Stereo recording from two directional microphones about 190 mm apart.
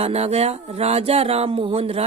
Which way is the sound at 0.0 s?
35° right (ahead or behind).